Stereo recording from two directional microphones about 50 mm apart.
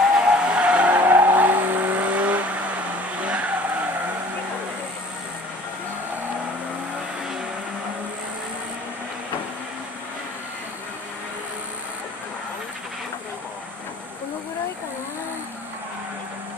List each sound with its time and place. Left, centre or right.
0.2 s vehicle: centre